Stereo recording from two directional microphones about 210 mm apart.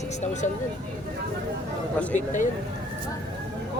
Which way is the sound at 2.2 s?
35° left (ahead or behind).